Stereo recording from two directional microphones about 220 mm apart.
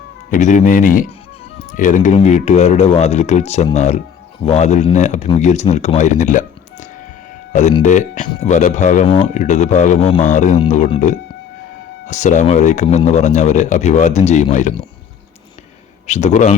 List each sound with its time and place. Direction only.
0.3 s speech: 35° left (ahead or behind)
16.0 s speech: 30° left (ahead or behind)